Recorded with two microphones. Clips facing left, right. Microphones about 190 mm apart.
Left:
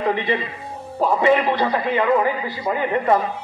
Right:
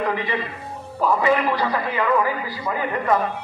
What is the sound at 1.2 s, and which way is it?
A man's voice, 30° left (ahead or behind).